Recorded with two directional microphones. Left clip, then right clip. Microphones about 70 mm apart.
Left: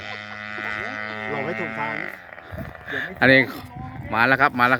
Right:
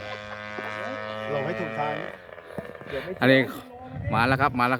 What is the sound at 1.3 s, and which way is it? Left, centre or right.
Sheep, right.